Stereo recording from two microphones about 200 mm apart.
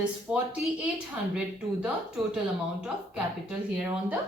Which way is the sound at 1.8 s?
5° right (ahead or behind).